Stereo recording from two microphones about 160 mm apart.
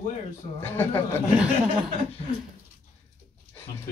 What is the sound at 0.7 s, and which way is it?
Speech, 15° left (ahead or behind).